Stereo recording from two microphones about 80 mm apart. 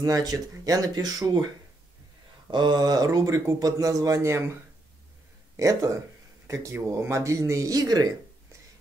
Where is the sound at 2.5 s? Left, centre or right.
Right.